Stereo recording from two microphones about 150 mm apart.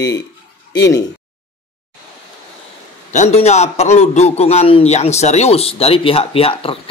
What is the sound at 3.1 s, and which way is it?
A man's voice, 50° left (ahead or behind).